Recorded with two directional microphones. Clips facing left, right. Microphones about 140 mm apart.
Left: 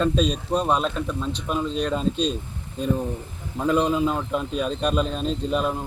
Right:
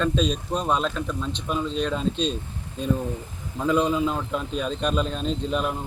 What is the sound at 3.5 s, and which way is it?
A man's voice, 5° left (ahead or behind).